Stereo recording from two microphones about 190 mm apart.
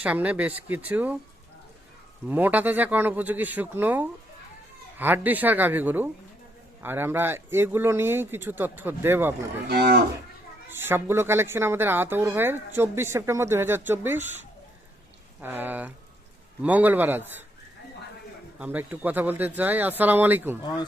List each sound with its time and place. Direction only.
0.0 s a woman's voice: 10° right (ahead or behind)
2.3 s a woman's voice: 10° right (ahead or behind)
9.6 s speech: 60° right (ahead or behind)
10.7 s a woman's voice: 10° right (ahead or behind)
15.4 s a woman's voice: 10° right (ahead or behind)
18.6 s a woman's voice: 10° right (ahead or behind)